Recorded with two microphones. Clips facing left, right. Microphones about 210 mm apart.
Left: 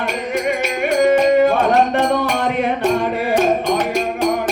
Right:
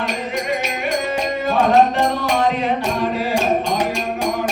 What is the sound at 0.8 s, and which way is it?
Music, 55° left (ahead or behind).